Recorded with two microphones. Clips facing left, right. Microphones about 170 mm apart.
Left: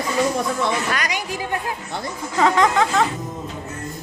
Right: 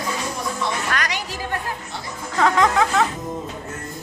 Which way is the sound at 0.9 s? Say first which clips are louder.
Left 1 dB; 10° left (ahead or behind).